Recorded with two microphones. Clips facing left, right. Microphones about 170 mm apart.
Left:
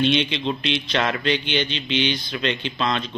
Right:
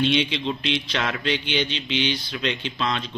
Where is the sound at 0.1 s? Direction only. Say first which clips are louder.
Left 1 dB; 5° right (ahead or behind).